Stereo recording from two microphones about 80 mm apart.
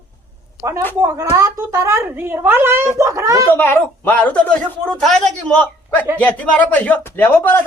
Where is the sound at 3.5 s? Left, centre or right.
Left; by 5.2 s centre.